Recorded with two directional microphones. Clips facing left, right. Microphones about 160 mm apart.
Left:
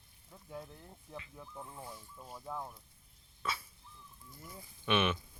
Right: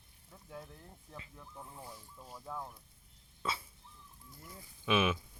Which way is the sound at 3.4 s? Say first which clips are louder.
Right 1 dB; 25° right (ahead or behind).